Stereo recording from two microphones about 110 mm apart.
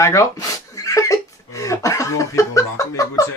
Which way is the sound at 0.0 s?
30° left (ahead or behind).